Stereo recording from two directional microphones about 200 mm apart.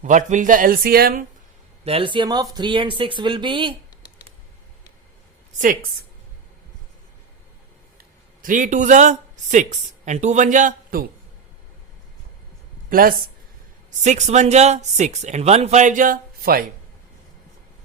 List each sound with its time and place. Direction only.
0.0 s speech: 40° right (ahead or behind)
1.8 s speech: 30° right (ahead or behind)
8.4 s speech: 40° right (ahead or behind)
12.9 s speech: 45° right (ahead or behind)